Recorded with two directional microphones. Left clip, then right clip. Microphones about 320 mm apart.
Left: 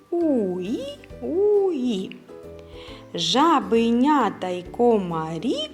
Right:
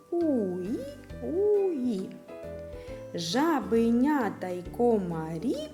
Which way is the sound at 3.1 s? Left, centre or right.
Right.